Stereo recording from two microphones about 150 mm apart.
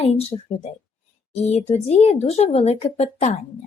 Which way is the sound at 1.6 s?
45° left (ahead or behind).